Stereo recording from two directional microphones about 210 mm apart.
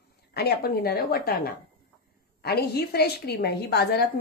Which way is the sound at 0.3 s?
50° left (ahead or behind).